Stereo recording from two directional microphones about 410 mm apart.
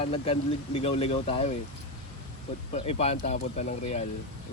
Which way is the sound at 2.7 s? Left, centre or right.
Centre.